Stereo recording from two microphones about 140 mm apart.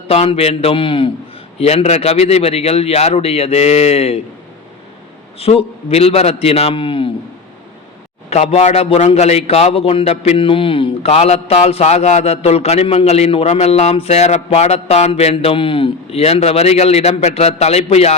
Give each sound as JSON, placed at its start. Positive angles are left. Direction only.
{"t": 0.1, "sound": "a man's voice", "side_deg": 45}
{"t": 5.4, "sound": "a man's voice", "side_deg": 45}
{"t": 8.3, "sound": "a man's voice", "side_deg": 50}